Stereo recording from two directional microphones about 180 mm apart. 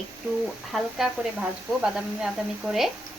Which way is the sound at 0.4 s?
Centre (ahead or behind).